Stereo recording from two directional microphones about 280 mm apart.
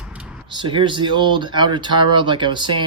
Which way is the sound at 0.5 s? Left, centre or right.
Centre.